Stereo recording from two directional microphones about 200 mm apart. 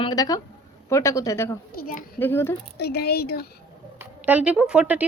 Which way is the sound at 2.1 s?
10° left (ahead or behind).